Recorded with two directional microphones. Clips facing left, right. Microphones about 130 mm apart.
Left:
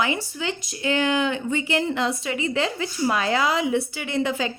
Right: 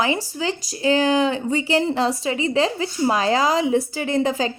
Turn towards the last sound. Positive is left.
turn(degrees=-35)  # may be behind; listen again after turning